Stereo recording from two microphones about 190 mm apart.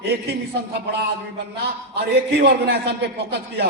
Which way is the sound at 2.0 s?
60° right (ahead or behind).